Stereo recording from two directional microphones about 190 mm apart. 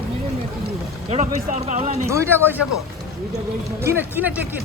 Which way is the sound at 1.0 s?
35° right (ahead or behind).